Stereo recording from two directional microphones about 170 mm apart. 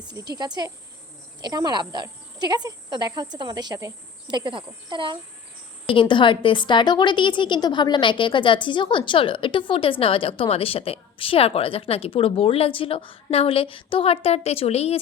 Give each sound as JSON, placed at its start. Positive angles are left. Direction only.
{"t": 0.1, "sound": "speech", "side_deg": -25}
{"t": 5.9, "sound": "a woman's voice", "side_deg": 30}